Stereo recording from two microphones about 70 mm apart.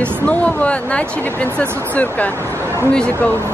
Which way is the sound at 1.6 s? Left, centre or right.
Right.